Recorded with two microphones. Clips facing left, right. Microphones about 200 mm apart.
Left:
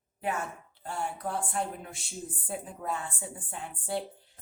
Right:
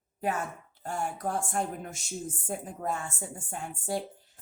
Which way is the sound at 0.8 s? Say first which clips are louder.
Right 2 dB; 45° right (ahead or behind).